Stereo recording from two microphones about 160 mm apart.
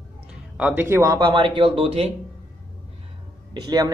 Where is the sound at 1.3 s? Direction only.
30° right (ahead or behind).